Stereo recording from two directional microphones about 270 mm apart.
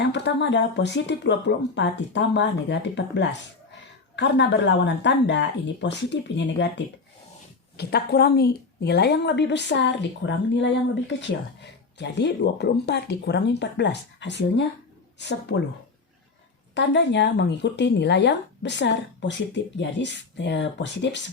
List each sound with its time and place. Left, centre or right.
0.0 s speech: left
11.9 s speech: left
16.7 s speech: left